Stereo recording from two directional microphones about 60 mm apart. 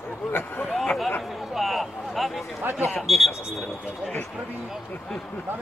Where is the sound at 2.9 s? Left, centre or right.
Centre.